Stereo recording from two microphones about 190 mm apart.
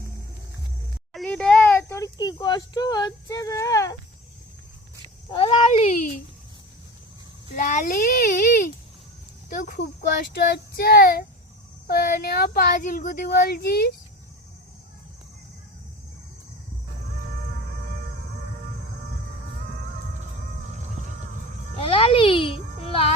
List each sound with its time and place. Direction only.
1.1 s a sound: 5° left (ahead or behind)
5.3 s speech: 25° left (ahead or behind)
7.5 s speech: 40° left (ahead or behind)
10.3 s child singing: 55° left (ahead or behind)
11.9 s speech: 50° left (ahead or behind)
21.8 s a sound: 30° left (ahead or behind)